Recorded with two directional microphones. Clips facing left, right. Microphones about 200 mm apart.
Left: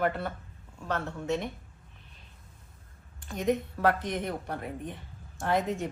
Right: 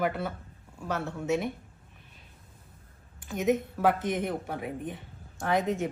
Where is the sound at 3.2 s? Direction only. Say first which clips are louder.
Right 2 dB; 5° right (ahead or behind).